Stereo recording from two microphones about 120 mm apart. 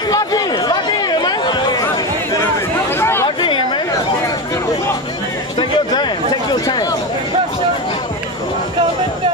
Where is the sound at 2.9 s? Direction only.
20° left (ahead or behind).